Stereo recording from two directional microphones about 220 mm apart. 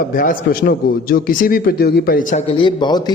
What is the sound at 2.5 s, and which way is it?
Speech, 20° left (ahead or behind).